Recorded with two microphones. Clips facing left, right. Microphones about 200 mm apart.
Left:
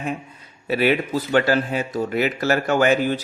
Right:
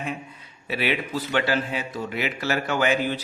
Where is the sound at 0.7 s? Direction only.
45° left (ahead or behind).